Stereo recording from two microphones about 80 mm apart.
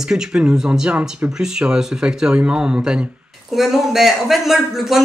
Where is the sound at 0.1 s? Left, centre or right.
Centre.